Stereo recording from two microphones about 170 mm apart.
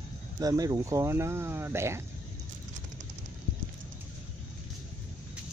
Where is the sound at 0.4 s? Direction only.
20° right (ahead or behind).